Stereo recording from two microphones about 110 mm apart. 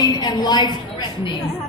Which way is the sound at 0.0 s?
40° left (ahead or behind).